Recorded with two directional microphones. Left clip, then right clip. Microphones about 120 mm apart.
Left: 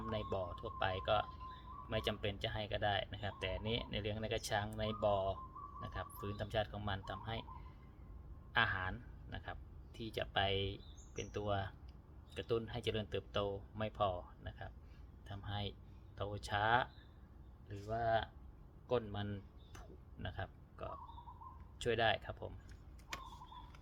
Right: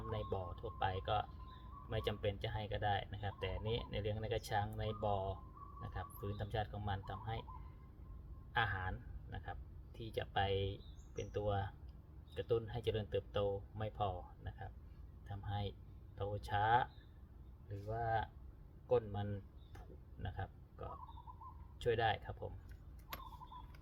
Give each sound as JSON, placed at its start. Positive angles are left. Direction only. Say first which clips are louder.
{"t": 0.0, "sound": "music", "louder": "left 2 dB", "side_deg": 35}
{"t": 1.9, "sound": "speech", "louder": "left 1 dB", "side_deg": 35}
{"t": 8.5, "sound": "speech", "louder": "left 3 dB", "side_deg": 35}
{"t": 18.9, "sound": "a sound", "louder": "right 2 dB", "side_deg": 35}
{"t": 20.2, "sound": "speech", "louder": "left 2 dB", "side_deg": 35}